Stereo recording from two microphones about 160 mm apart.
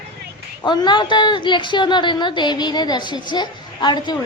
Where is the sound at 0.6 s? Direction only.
30° left (ahead or behind).